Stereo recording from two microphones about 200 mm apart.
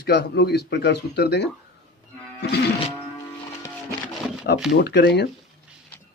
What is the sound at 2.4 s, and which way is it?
Music, 55° left (ahead or behind).